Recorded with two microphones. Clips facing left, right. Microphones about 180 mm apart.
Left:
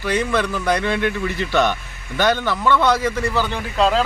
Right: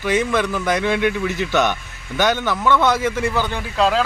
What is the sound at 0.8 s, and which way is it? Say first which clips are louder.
A man's voice: right 2 dB; 10° right (ahead or behind).